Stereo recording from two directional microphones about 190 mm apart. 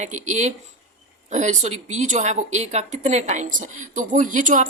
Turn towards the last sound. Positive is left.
turn(degrees=-40)  # may be behind; listen again after turning